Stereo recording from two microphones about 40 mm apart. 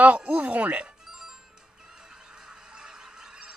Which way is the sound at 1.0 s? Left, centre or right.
Centre.